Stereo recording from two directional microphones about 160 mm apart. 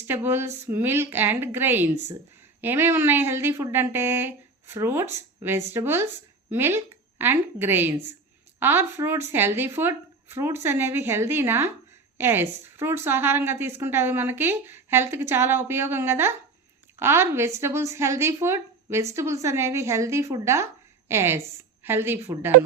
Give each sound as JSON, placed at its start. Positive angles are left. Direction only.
{"t": 0.1, "sound": "a woman's voice", "side_deg": -15}